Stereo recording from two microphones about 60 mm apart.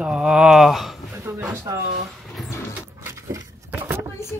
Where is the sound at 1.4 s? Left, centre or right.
Right.